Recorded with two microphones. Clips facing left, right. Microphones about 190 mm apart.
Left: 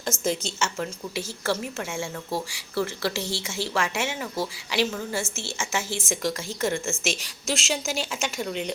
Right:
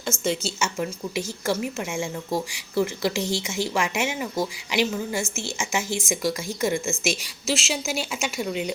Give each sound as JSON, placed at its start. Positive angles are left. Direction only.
{"t": 0.1, "sound": "speech", "side_deg": 20}
{"t": 0.6, "sound": "speech", "side_deg": -15}